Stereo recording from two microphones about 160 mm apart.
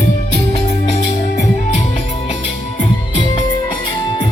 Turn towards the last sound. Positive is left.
turn(degrees=35)  # may be behind; listen again after turning